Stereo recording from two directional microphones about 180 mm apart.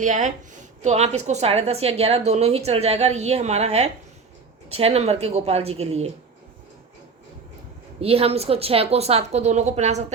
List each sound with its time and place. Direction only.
0.0 s a woman's voice: 45° right (ahead or behind)
8.0 s a woman's voice: 35° right (ahead or behind)